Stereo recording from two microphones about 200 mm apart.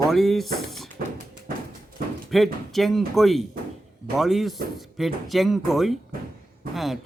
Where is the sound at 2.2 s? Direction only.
Centre (ahead or behind).